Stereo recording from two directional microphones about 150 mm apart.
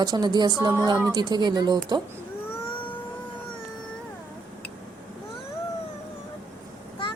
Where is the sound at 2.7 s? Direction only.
35° left (ahead or behind).